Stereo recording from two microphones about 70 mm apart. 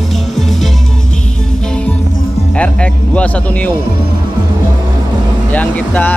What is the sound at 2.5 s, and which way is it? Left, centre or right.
Speech, centre.